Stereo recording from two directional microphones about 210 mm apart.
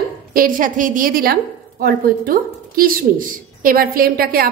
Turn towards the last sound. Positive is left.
turn(degrees=-45)  # may be behind; listen again after turning